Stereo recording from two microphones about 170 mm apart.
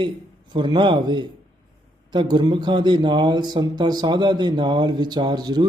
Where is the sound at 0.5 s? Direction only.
25° right (ahead or behind).